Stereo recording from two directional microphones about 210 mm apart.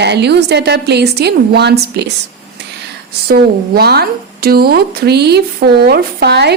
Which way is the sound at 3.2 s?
50° right (ahead or behind).